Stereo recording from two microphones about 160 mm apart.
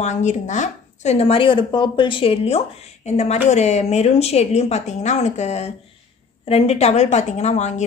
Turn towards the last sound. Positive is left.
turn(degrees=45)  # may be behind; listen again after turning